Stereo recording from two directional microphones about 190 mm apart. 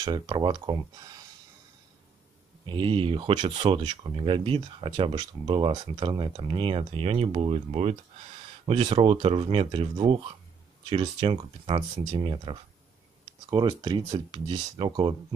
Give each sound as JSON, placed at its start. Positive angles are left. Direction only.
{"t": 0.0, "sound": "speech", "side_deg": -25}
{"t": 2.6, "sound": "speech", "side_deg": -25}